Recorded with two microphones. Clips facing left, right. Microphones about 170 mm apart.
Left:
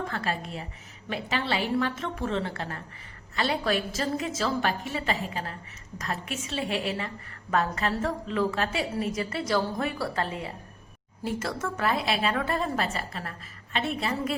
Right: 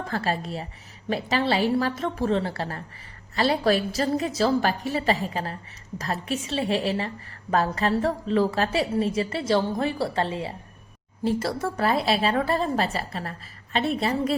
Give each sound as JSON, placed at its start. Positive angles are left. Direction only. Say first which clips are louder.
{"t": 0.1, "sound": "a woman's voice", "louder": "right 4 dB", "side_deg": -35}